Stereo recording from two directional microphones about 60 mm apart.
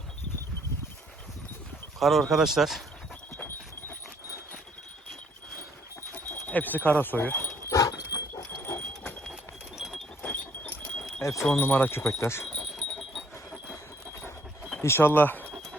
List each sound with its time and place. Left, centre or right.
2.0 s speech: centre
3.3 s horse: left
6.5 s wind chime: left
7.7 s dog: left
9.3 s a sound: centre
10.2 s wind chime: left
11.2 s chime: left
11.5 s wind chime: left
12.2 s chime: left
12.7 s wind chime: centre
14.8 s speech: left